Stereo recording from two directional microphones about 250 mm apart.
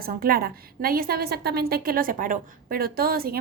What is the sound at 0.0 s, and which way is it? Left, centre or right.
A woman's voice, right.